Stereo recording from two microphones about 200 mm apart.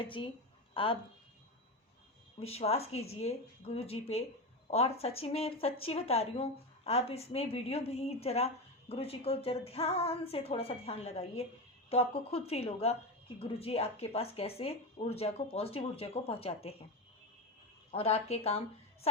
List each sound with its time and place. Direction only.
0.0 s speech: 25° left (ahead or behind)
2.4 s a woman's voice: 30° left (ahead or behind)
17.9 s a woman's voice: 30° left (ahead or behind)